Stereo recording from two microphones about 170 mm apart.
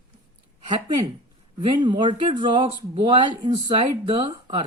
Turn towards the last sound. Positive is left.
turn(degrees=-25)  # may be behind; listen again after turning